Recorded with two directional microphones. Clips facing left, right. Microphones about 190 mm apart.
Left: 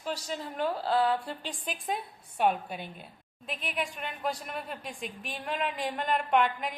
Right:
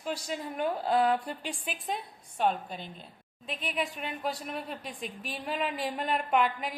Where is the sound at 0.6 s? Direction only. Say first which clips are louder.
Right 1 dB; 15° right (ahead or behind).